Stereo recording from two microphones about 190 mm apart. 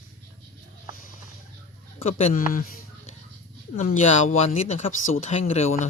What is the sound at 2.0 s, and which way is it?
Speech, 35° left (ahead or behind).